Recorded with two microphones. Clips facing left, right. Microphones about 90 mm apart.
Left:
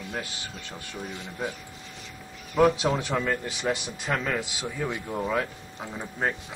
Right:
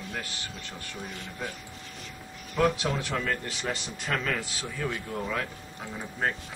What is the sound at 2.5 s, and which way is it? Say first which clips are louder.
A man's voice: left 4 dB; 20° left (ahead or behind).